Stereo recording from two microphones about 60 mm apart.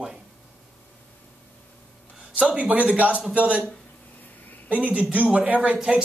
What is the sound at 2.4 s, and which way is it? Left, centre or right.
Speech, right.